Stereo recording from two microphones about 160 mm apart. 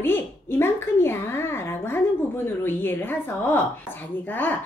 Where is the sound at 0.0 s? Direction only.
15° left (ahead or behind).